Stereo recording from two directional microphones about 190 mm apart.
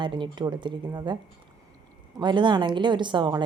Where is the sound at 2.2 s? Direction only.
25° right (ahead or behind).